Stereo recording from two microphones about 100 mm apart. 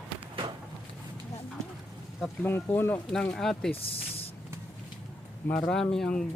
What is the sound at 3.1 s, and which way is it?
Speech, 5° left (ahead or behind).